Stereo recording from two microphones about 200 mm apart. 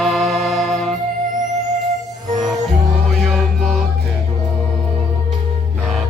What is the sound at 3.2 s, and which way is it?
Music, centre (ahead or behind).